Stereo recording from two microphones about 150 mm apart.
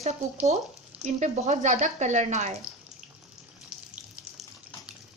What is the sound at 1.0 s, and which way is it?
Speech, 50° right (ahead or behind).